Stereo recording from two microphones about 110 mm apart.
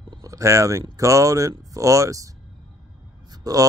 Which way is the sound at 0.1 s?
30° right (ahead or behind).